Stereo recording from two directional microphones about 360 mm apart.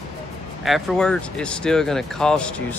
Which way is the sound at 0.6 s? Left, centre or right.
Centre.